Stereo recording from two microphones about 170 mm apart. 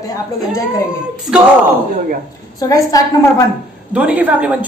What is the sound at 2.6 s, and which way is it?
Speech, 20° left (ahead or behind).